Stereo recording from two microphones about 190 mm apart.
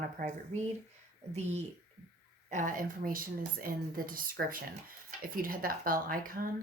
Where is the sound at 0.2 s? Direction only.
50° right (ahead or behind).